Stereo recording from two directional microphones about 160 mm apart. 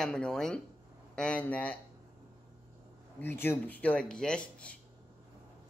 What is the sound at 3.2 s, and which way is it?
Speech, 15° left (ahead or behind).